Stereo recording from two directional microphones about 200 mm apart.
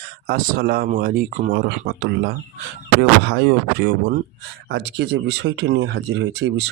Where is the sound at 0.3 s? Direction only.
50° right (ahead or behind).